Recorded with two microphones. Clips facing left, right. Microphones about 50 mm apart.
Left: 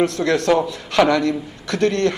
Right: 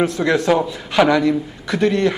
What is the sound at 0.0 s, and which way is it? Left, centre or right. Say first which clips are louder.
A man's voice: right 1 dB; centre.